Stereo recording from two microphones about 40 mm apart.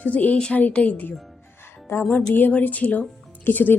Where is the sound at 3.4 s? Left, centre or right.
Left.